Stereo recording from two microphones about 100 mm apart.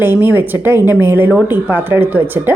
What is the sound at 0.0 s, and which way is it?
A woman's voice, 20° right (ahead or behind).